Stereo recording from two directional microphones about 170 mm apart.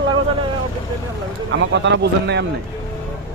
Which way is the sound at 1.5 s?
90° right.